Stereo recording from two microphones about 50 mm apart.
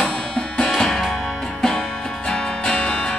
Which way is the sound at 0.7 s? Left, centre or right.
Centre.